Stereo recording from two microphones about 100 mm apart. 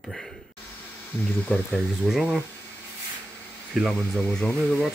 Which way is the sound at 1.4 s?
10° left (ahead or behind).